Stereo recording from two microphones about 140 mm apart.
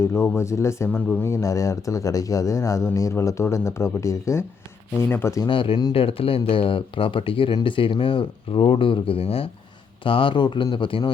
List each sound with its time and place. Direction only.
0.0 s speech: 20° left (ahead or behind)
5.5 s a man's voice: 35° left (ahead or behind)